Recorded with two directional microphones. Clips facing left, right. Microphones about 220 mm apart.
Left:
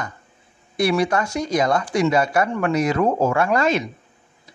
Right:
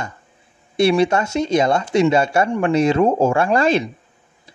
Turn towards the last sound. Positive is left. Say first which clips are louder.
# right 3 dB
turn(degrees=-30)  # may be behind; listen again after turning